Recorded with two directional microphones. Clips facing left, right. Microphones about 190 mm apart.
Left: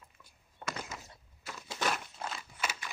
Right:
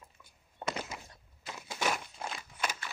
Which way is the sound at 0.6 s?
25° right (ahead or behind).